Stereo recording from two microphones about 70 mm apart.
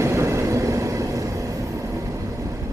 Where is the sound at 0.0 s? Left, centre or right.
Right.